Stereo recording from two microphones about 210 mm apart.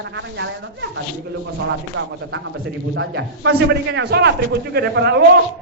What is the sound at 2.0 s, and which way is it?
A man's voice, 65° right (ahead or behind).